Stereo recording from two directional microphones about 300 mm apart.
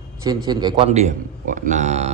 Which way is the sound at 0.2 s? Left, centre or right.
Centre.